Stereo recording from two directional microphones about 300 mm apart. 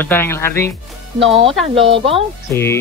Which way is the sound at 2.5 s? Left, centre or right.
Centre.